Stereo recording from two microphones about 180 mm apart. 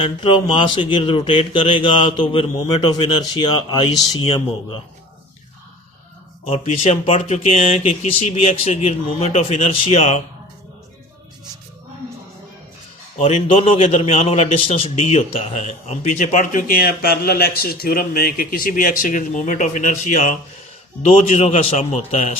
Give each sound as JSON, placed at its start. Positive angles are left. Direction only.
{"t": 0.0, "sound": "speech", "side_deg": 25}
{"t": 6.4, "sound": "speech", "side_deg": 35}
{"t": 13.1, "sound": "a man's voice", "side_deg": 35}